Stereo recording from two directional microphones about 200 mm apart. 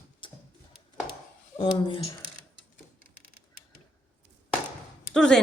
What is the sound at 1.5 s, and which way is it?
Speech, 25° left (ahead or behind).